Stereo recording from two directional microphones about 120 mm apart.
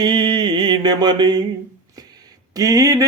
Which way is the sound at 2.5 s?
30° right (ahead or behind).